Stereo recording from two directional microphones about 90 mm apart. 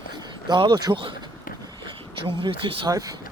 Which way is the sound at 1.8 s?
70° right (ahead or behind).